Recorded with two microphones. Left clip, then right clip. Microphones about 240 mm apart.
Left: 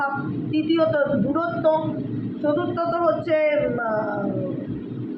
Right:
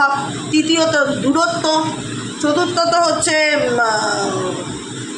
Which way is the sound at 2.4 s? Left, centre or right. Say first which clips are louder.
Right 7 dB; right.